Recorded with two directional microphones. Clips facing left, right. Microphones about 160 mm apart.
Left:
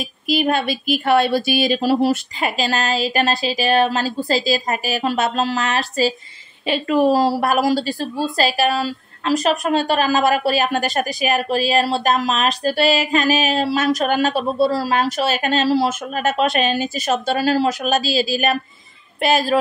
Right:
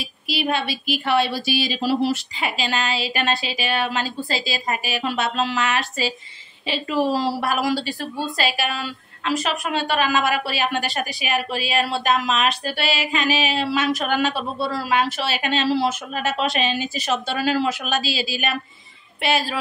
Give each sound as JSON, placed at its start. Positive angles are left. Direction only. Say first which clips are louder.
{"t": 0.3, "sound": "a woman's voice", "louder": "left 5 dB", "side_deg": 45}
{"t": 6.6, "sound": "a woman's voice", "louder": "left 6 dB", "side_deg": 50}